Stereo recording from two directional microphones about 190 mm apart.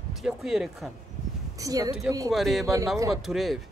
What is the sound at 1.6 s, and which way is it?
Speech, 20° right (ahead or behind).